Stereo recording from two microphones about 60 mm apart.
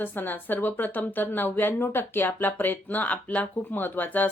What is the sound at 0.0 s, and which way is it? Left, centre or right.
Speech, left.